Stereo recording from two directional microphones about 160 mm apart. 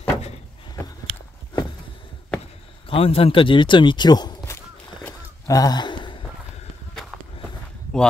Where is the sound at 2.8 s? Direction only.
35° left (ahead or behind); by 4.6 s 20° left (ahead or behind).